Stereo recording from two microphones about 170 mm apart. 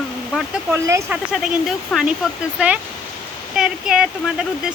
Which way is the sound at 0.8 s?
15° right (ahead or behind).